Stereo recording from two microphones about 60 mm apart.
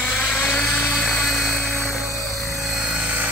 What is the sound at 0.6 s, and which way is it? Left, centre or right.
Helicopter, centre.